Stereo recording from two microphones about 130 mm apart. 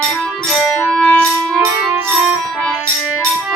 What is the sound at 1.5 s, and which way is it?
Music, 15° right (ahead or behind).